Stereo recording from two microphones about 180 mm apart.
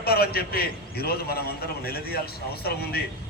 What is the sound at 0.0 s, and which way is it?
A man's voice, 60° left (ahead or behind).